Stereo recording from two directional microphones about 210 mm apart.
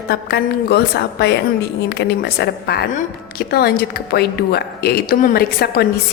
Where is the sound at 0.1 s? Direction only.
50° left (ahead or behind).